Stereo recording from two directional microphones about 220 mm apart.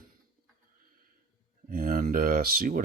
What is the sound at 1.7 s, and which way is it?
Speech, 40° right (ahead or behind).